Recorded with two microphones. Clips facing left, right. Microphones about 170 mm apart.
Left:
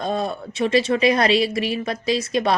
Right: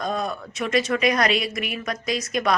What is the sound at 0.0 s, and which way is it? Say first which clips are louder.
Speech: left 3 dB; 30° left (ahead or behind).